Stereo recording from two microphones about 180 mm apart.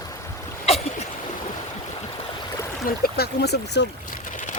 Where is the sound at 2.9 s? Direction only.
60° left (ahead or behind).